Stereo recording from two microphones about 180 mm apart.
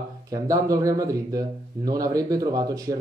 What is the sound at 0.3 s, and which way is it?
Speech, 20° right (ahead or behind).